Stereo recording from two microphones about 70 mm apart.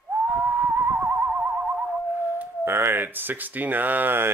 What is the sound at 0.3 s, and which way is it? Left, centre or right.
Theremin, right.